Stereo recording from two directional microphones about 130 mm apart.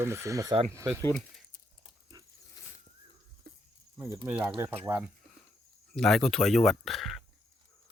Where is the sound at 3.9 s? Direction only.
20° right (ahead or behind).